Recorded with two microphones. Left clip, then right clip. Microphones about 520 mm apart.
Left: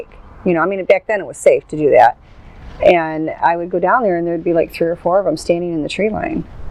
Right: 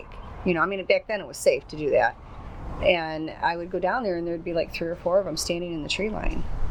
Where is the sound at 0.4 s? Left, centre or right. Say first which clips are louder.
Left 10 dB; left.